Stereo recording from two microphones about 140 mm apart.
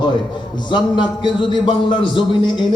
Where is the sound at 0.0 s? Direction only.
35° left (ahead or behind).